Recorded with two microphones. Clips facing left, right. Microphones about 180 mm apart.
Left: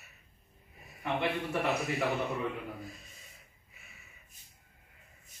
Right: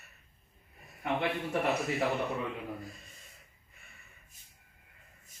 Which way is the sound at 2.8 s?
Centre (ahead or behind).